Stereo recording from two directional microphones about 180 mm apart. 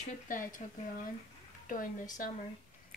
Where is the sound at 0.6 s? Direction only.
45° left (ahead or behind).